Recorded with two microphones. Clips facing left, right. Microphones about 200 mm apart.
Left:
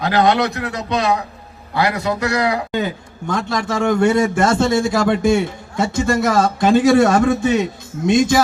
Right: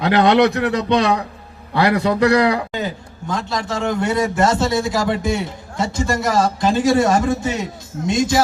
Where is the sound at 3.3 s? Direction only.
55° left (ahead or behind).